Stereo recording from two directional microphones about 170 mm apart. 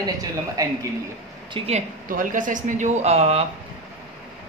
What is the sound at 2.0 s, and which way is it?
Speech, 50° right (ahead or behind).